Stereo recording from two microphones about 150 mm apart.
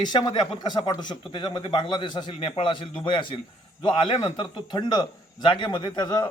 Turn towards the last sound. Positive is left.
turn(degrees=30)  # may be behind; listen again after turning